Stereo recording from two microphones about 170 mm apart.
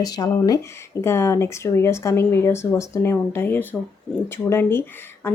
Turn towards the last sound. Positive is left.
turn(degrees=15)  # may be behind; listen again after turning